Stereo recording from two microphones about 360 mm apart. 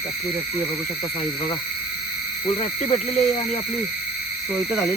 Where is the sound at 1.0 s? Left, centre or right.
Centre.